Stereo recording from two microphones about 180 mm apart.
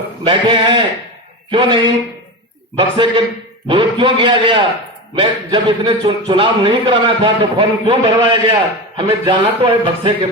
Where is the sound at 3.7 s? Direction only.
30° right (ahead or behind).